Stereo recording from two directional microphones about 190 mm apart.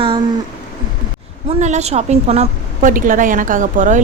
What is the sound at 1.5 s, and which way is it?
A woman's voice, 40° right (ahead or behind).